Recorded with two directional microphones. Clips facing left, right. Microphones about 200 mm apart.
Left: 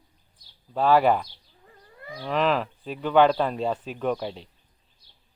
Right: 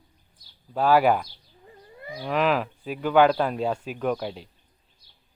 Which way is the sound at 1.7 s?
15° right (ahead or behind).